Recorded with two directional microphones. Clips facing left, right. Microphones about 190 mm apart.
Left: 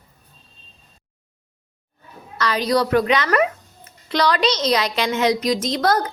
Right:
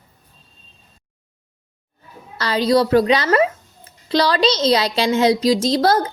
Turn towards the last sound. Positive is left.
turn(degrees=-30)  # may be behind; listen again after turning